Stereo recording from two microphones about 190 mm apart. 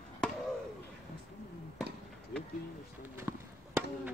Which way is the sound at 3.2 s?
15° right (ahead or behind).